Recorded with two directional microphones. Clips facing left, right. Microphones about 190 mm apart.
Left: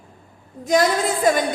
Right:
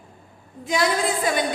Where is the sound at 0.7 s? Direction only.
45° left (ahead or behind).